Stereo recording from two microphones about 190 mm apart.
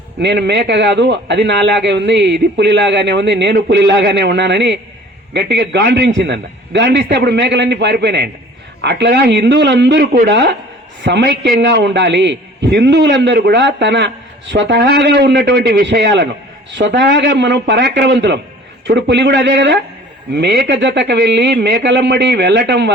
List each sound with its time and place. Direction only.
0.2 s a man's voice: 65° right (ahead or behind)